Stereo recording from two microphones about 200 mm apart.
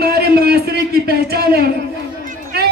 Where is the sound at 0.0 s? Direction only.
50° right (ahead or behind).